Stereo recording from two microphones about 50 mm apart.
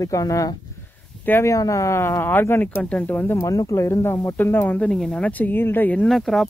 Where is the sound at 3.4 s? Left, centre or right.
Left.